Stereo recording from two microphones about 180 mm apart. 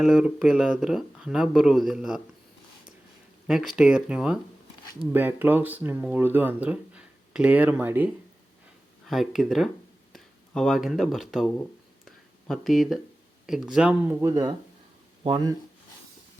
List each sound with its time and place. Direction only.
0.0 s speech: 5° right (ahead or behind)
3.4 s speech: centre (ahead or behind)
12.0 s a sound: centre (ahead or behind)
13.5 s speech: 5° right (ahead or behind)
14.2 s speech: 20° right (ahead or behind)